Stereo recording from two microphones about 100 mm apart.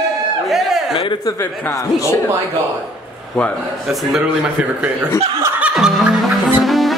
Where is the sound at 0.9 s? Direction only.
60° left (ahead or behind).